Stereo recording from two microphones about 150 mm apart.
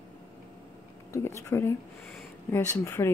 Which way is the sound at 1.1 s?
20° left (ahead or behind).